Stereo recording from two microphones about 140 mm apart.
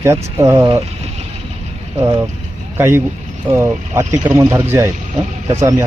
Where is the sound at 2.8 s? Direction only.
20° right (ahead or behind).